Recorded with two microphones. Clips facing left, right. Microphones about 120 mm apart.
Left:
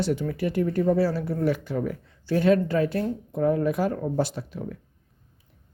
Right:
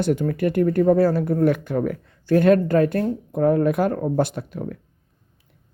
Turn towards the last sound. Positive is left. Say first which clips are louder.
# right 4 dB
turn(degrees=-60)  # may be behind; listen again after turning